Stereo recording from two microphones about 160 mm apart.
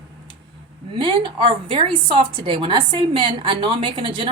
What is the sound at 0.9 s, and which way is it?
A woman's voice, 30° right (ahead or behind).